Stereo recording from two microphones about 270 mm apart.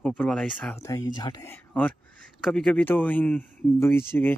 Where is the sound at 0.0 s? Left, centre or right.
Centre.